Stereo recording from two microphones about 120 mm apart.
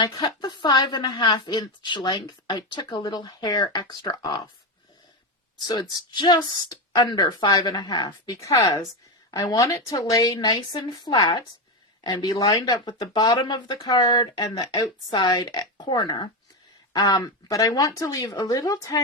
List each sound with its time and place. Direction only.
0.0 s a woman's voice: 40° left (ahead or behind)
5.6 s a woman's voice: 35° left (ahead or behind)